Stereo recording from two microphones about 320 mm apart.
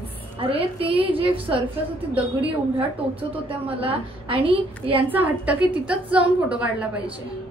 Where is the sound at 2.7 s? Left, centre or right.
Centre.